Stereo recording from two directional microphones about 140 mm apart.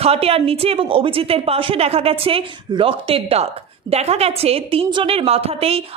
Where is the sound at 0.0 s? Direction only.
45° right (ahead or behind).